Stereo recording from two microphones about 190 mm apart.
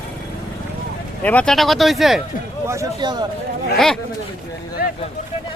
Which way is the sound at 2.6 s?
20° right (ahead or behind).